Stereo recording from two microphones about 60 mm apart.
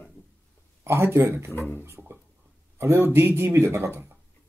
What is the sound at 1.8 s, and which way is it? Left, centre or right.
Speech, right.